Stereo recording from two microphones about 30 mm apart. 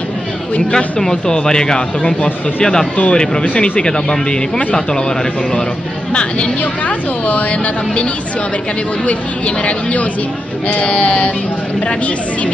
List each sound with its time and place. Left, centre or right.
0.7 s speech: left
3.1 s speech: left
10.7 s a sound: left